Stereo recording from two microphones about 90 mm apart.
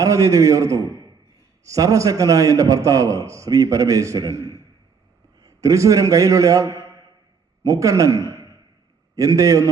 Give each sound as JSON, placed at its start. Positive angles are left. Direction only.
{"t": 0.0, "sound": "a man's voice", "side_deg": -35}